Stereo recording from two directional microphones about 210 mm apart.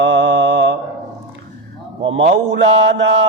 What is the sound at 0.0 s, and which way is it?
Mantra, 55° right (ahead or behind).